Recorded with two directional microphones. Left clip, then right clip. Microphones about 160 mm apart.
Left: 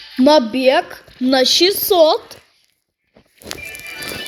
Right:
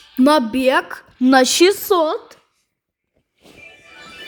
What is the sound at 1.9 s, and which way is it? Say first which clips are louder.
Speech: left 5 dB; 25° right (ahead or behind).